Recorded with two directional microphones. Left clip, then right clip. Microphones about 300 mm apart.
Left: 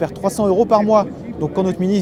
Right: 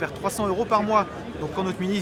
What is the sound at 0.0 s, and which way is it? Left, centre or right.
Speech, left.